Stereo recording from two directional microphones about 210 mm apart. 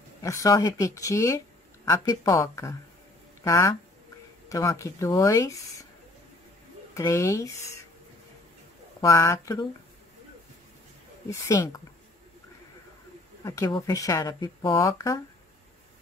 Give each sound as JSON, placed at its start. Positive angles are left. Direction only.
{"t": 0.2, "sound": "speech", "side_deg": 15}
{"t": 6.9, "sound": "speech", "side_deg": 15}
{"t": 9.0, "sound": "speech", "side_deg": 15}
{"t": 11.2, "sound": "speech", "side_deg": 15}
{"t": 13.4, "sound": "speech", "side_deg": 15}